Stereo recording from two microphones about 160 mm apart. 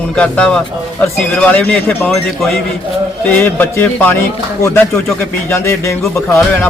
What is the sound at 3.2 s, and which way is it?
Speech, 10° left (ahead or behind).